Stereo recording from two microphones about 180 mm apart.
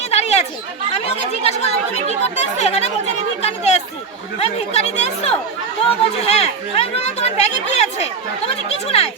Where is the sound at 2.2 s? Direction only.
35° left (ahead or behind).